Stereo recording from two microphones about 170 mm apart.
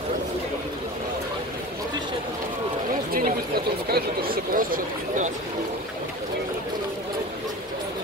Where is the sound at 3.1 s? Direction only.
60° right (ahead or behind).